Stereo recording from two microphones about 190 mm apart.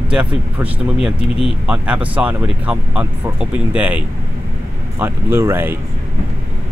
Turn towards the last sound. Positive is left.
turn(degrees=-15)  # may be behind; listen again after turning